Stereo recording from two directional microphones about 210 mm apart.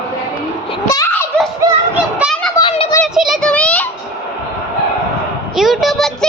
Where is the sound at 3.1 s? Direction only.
Centre (ahead or behind).